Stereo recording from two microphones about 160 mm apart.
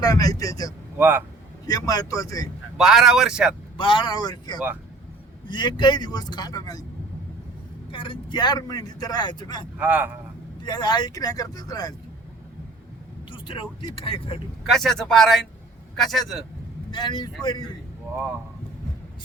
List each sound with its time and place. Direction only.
0.0 s a man's voice: 25° left (ahead or behind)
0.9 s a man's voice: 10° right (ahead or behind)
1.6 s a man's voice: 25° left (ahead or behind)
2.7 s speech: centre (ahead or behind)
3.8 s a man's voice: 30° left (ahead or behind)
7.9 s a man's voice: 30° left (ahead or behind)
9.7 s a man's voice: 10° right (ahead or behind)
10.7 s a man's voice: 30° left (ahead or behind)
13.3 s speech: 35° left (ahead or behind)
14.7 s speech: centre (ahead or behind)
16.9 s a man's voice: 25° left (ahead or behind)